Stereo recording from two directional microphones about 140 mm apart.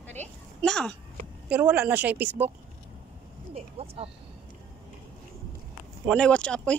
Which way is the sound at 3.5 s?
45° right (ahead or behind).